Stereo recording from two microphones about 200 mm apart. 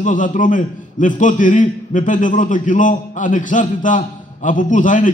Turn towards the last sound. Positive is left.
turn(degrees=40)  # may be behind; listen again after turning